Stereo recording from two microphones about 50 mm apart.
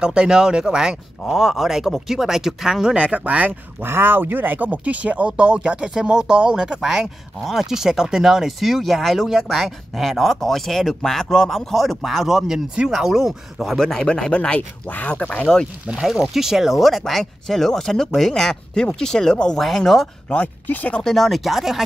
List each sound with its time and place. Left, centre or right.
0.0 s speech: centre
1.2 s speech: centre; by 3.5 s right
3.8 s speech: right; by 12.5 s centre
12.5 s speech: centre
13.7 s speech: centre
14.9 s speech: left
15.3 s speech: centre
15.9 s speech: centre
20.6 s speech: left
20.9 s speech: centre